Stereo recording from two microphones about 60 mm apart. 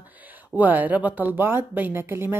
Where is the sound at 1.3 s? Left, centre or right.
Right.